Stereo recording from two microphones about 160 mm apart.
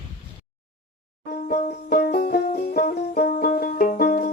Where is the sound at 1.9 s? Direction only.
70° left (ahead or behind).